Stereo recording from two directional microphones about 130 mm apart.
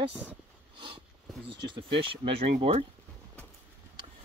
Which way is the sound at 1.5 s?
40° right (ahead or behind).